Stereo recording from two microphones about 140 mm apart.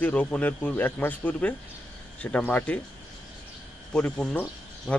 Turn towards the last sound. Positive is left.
turn(degrees=10)  # may be behind; listen again after turning